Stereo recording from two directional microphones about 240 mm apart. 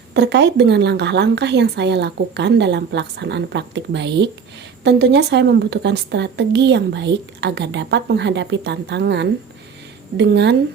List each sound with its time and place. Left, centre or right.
0.1 s a woman's voice: right